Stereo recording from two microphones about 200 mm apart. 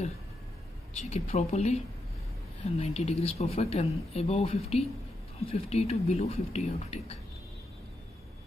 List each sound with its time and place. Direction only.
0.9 s speech: 35° left (ahead or behind)
2.8 s speech: 35° left (ahead or behind)